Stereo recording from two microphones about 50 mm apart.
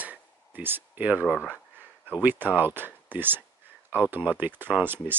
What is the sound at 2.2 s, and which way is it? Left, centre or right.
Speech, right.